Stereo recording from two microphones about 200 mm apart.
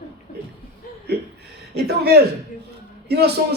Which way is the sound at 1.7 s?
55° right (ahead or behind).